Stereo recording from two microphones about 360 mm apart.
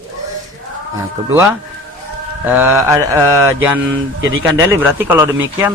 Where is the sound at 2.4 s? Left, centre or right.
Centre.